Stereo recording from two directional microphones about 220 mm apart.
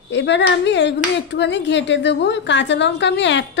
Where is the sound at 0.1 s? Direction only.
55° left (ahead or behind).